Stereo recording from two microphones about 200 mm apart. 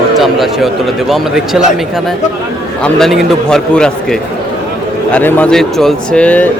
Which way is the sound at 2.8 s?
Centre (ahead or behind).